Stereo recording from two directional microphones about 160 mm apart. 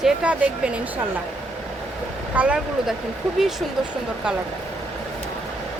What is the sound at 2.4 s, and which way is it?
Speech, 5° right (ahead or behind).